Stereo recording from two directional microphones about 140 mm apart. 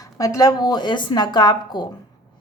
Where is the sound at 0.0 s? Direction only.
25° left (ahead or behind).